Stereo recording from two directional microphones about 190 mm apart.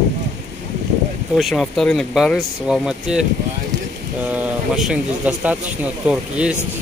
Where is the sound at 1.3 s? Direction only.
Centre (ahead or behind).